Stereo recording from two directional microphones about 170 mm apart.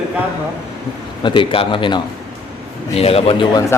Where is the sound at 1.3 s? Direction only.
30° left (ahead or behind).